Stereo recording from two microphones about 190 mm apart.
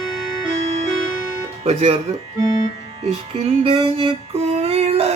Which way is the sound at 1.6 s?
35° right (ahead or behind).